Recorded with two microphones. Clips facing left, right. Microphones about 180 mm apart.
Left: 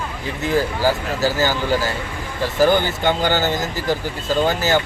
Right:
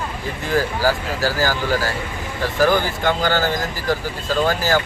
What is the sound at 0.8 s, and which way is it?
Speech, 25° left (ahead or behind).